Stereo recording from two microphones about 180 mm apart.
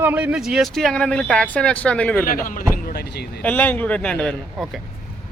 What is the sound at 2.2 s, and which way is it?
Speech, 50° left (ahead or behind).